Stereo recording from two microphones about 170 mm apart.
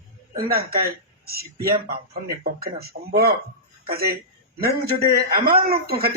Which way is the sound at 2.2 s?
65° right (ahead or behind).